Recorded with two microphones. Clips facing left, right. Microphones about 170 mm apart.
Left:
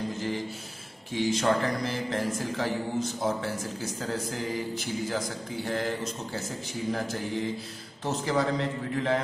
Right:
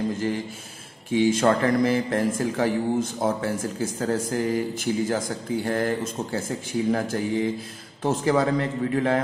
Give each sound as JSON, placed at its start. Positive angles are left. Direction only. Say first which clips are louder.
{"t": 1.1, "sound": "speech", "louder": "right 6 dB", "side_deg": -50}